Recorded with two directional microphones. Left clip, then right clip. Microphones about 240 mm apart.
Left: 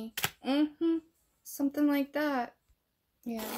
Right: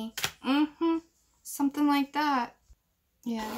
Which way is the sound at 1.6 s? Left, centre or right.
Centre.